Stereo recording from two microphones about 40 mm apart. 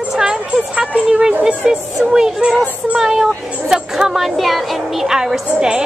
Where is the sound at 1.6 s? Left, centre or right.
Centre.